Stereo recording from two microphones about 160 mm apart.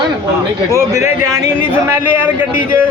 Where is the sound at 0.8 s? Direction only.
20° right (ahead or behind).